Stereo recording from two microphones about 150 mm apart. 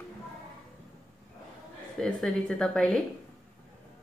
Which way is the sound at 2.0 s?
5° left (ahead or behind).